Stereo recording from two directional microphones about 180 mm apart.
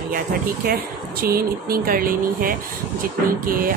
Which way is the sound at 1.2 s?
55° right (ahead or behind).